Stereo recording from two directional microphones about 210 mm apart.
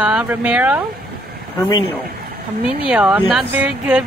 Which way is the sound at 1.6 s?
20° left (ahead or behind).